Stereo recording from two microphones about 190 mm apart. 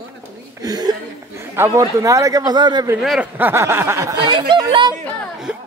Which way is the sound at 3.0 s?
5° right (ahead or behind).